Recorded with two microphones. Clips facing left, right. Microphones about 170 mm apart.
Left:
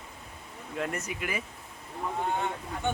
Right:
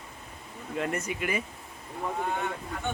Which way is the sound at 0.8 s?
Centre (ahead or behind).